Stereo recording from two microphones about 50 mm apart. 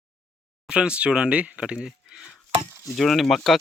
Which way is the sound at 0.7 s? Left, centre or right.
Centre.